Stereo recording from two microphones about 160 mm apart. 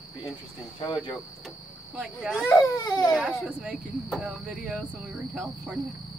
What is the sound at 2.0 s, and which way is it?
Speech, 5° right (ahead or behind).